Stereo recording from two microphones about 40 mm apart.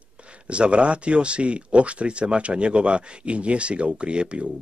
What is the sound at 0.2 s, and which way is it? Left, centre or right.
Speech, right.